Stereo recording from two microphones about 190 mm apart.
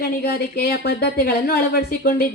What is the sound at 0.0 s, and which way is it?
A woman's voice, 55° left (ahead or behind).